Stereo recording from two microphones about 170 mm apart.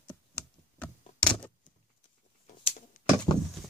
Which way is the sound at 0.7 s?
5° left (ahead or behind).